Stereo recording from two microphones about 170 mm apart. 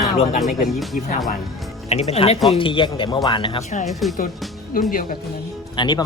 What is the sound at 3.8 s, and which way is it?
Speech, centre (ahead or behind).